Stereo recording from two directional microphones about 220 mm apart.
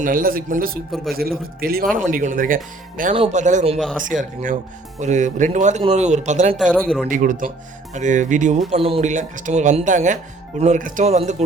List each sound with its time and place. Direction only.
0.0 s a man's voice: 40° right (ahead or behind)